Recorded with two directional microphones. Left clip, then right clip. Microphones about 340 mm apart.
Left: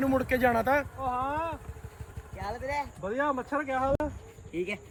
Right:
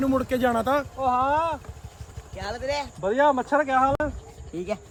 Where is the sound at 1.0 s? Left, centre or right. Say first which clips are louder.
Right 8 dB; right.